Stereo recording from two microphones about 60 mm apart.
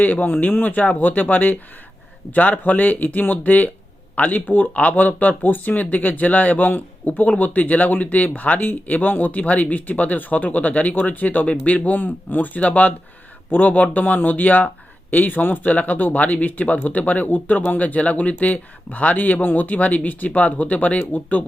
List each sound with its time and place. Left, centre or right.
0.0 s speech: left